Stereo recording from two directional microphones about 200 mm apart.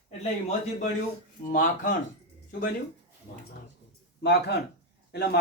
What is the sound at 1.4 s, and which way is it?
Speech, 40° left (ahead or behind).